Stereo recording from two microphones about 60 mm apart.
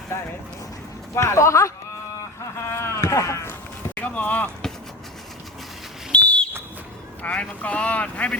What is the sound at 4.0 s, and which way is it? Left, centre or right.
Speech, left.